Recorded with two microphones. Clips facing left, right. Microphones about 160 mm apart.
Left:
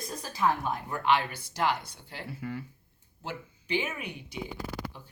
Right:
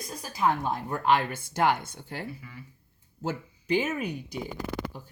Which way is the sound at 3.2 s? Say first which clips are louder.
Right 7 dB; 40° right (ahead or behind).